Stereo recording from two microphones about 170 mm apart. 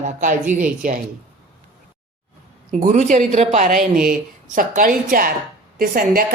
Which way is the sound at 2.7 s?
45° right (ahead or behind).